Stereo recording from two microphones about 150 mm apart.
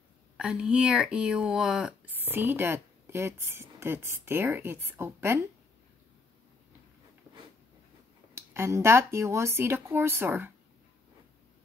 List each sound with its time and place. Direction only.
0.4 s speech: 5° right (ahead or behind)
8.4 s speech: 15° right (ahead or behind)